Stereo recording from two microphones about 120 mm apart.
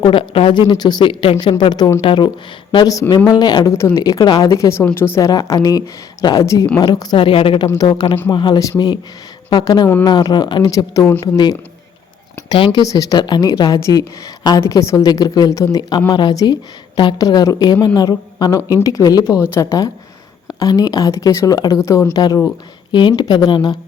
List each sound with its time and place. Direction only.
0.0 s speech: 45° left (ahead or behind)
0.7 s speech: 35° left (ahead or behind)
2.7 s speech: 30° left (ahead or behind)
3.7 s a woman's voice: 25° left (ahead or behind)
5.3 s a woman's voice: 35° left (ahead or behind); by 7.7 s 50° left (ahead or behind)
7.7 s speech: 35° left (ahead or behind)
12.5 s speech: 40° left (ahead or behind)
12.8 s a woman's voice: 30° left (ahead or behind)